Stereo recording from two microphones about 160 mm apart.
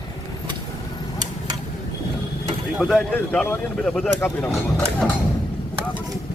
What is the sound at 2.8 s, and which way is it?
A man's voice, 5° left (ahead or behind).